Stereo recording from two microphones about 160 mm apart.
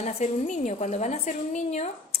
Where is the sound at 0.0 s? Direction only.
45° left (ahead or behind).